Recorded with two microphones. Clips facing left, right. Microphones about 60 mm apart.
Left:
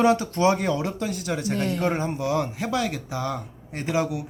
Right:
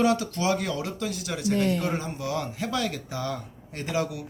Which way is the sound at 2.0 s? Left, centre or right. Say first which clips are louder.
Left 5 dB; left.